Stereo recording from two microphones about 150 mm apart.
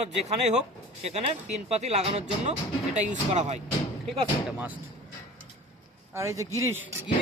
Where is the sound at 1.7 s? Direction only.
45° right (ahead or behind).